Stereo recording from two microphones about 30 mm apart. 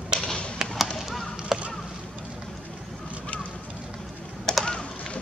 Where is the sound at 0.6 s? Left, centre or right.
Right.